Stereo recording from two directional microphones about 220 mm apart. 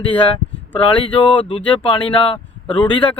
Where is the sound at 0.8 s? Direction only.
25° left (ahead or behind).